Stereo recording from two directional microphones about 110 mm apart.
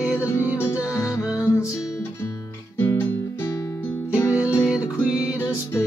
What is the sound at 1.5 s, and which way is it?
Music, 30° left (ahead or behind).